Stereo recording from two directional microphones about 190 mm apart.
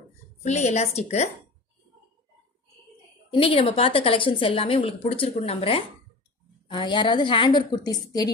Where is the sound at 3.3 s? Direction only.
30° left (ahead or behind).